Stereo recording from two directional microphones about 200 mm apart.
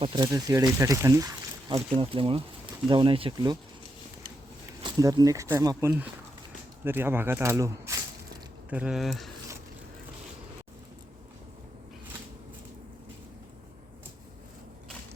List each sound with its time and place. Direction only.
0.0 s speech: 20° right (ahead or behind)
2.0 s speech: 25° right (ahead or behind)
4.8 s speech: 20° right (ahead or behind)
8.7 s speech: 5° right (ahead or behind)